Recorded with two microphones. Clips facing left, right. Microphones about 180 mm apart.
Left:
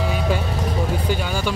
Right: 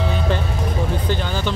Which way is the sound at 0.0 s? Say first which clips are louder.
Even; 10° left (ahead or behind).